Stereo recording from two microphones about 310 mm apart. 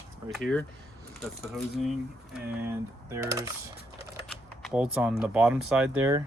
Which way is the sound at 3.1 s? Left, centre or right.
Centre.